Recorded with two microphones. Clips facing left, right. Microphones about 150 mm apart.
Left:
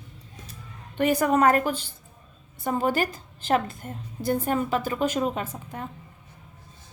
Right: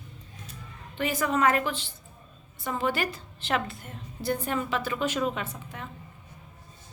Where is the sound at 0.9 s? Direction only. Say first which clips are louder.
Left 6 dB; 50° left (ahead or behind).